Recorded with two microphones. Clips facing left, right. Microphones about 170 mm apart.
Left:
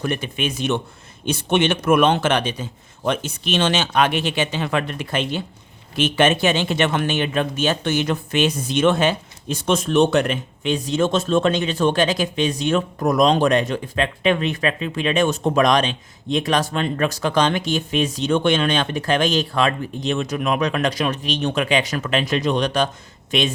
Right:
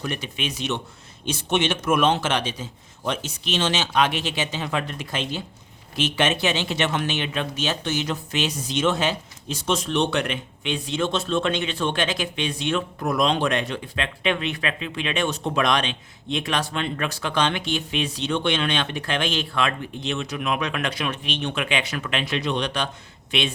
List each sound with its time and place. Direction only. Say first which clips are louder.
0.0 s a man's voice: left 6 dB; 55° left (ahead or behind)